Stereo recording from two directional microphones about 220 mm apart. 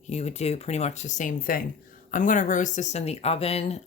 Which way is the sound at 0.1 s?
30° left (ahead or behind).